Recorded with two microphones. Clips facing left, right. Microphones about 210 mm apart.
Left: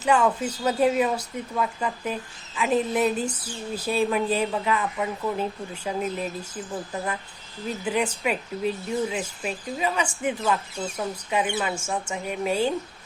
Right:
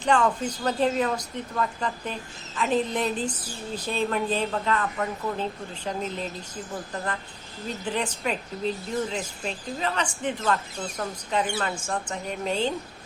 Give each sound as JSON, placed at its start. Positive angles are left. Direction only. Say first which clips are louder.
{"t": 0.0, "sound": "speech", "louder": "left 1 dB", "side_deg": 5}